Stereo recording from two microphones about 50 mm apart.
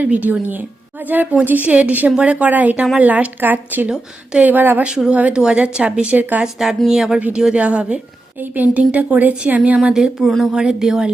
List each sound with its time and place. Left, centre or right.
0.0 s a woman's voice: right
3.8 s speech: centre
4.4 s speech: right
4.8 s a woman's voice: centre
7.5 s a woman's voice: right
9.7 s speech: centre